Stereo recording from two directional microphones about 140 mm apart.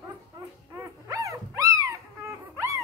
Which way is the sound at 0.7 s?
25° right (ahead or behind).